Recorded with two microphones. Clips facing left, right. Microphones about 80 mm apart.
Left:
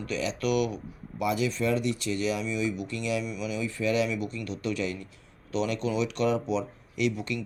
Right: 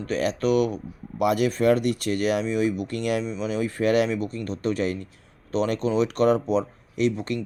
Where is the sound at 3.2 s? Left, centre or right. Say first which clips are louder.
Right 5 dB; right.